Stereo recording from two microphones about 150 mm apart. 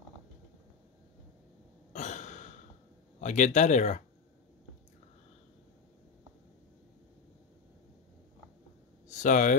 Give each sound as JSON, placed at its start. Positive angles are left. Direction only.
{"t": 1.9, "sound": "cough", "side_deg": 50}
{"t": 3.2, "sound": "speech", "side_deg": 55}
{"t": 9.2, "sound": "speech", "side_deg": 60}